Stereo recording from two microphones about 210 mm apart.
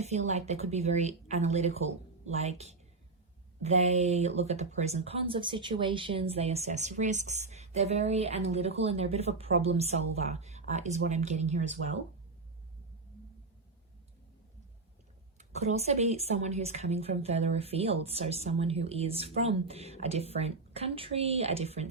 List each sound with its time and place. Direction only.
0.0 s a woman's voice: 30° right (ahead or behind)
15.4 s speech: 30° right (ahead or behind)